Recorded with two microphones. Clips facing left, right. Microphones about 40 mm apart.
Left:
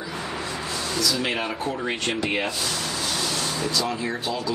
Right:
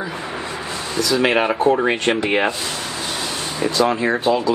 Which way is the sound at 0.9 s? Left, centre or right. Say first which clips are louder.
Right 9 dB; right.